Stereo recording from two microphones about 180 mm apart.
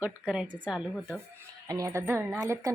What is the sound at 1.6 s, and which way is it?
A woman's voice, 15° right (ahead or behind).